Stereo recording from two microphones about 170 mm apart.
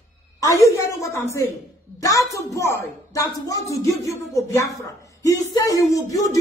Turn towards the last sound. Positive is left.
turn(degrees=20)  # may be behind; listen again after turning